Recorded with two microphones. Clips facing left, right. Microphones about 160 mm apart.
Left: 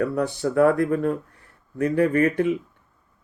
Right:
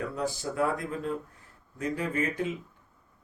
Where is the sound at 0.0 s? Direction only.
65° left (ahead or behind).